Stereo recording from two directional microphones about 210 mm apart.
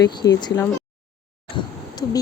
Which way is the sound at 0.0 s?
20° left (ahead or behind).